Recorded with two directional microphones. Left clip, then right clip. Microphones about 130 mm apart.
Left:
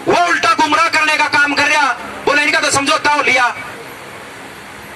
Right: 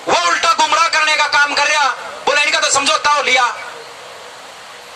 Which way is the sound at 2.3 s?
75° right (ahead or behind).